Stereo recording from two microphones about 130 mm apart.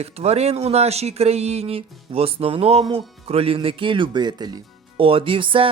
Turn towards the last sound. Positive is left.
turn(degrees=-40)  # may be behind; listen again after turning